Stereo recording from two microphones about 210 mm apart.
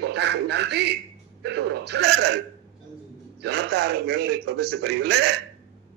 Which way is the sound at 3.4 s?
55° right (ahead or behind).